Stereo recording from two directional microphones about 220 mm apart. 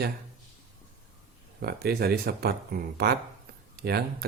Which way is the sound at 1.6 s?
45° right (ahead or behind).